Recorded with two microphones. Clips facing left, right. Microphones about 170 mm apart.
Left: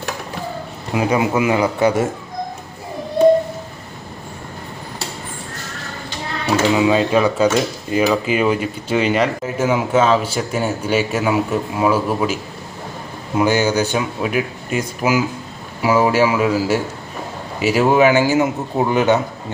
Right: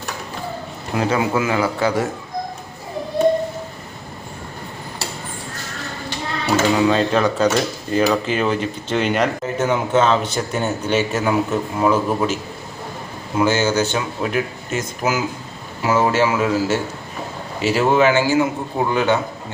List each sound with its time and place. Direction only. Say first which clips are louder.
0.9 s speech: left 2 dB; 15° left (ahead or behind)
6.7 s speech: left 2 dB; 10° left (ahead or behind)
13.4 s speech: left 1 dB; 15° left (ahead or behind)